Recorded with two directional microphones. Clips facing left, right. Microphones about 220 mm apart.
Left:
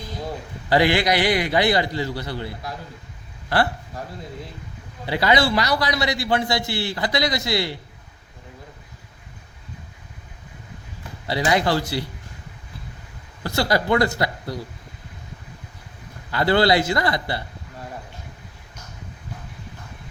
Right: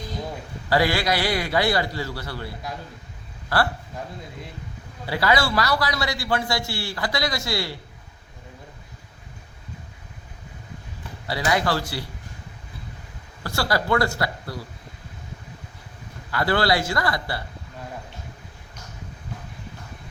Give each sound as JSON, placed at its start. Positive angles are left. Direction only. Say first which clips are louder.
{"t": 0.7, "sound": "a man's voice", "louder": "left 3 dB", "side_deg": 20}
{"t": 3.5, "sound": "a man's voice", "louder": "left 2 dB", "side_deg": 20}
{"t": 5.0, "sound": "a man's voice", "louder": "left 3 dB", "side_deg": 20}
{"t": 11.3, "sound": "a man's voice", "louder": "left 3 dB", "side_deg": 25}
{"t": 13.4, "sound": "a man's voice", "louder": "left 3 dB", "side_deg": 20}
{"t": 16.3, "sound": "a man's voice", "louder": "left 4 dB", "side_deg": 25}